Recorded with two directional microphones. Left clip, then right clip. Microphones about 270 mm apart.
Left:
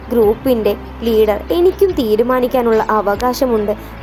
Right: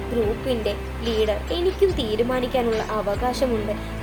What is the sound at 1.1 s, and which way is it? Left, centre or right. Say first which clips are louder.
A woman's voice: left 10 dB; left.